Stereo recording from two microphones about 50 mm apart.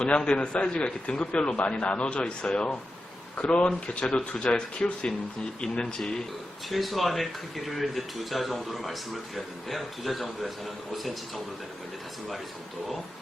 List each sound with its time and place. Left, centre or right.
0.0 s speech: centre
6.7 s speech: centre